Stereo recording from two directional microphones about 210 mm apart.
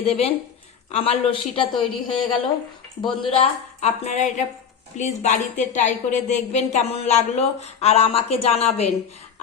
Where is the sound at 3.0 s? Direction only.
25° left (ahead or behind).